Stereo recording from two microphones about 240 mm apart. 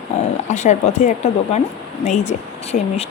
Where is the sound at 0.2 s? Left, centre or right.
Left.